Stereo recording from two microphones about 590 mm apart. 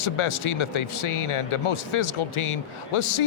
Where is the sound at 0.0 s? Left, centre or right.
Left.